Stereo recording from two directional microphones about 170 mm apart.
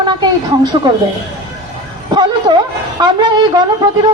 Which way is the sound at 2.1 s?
25° right (ahead or behind).